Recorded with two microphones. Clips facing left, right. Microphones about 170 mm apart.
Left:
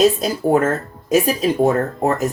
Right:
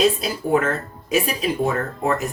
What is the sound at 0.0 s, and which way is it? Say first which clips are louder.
Speech: left 4 dB; 45° left (ahead or behind).